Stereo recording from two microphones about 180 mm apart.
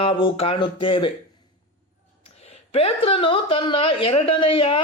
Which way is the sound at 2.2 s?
35° left (ahead or behind).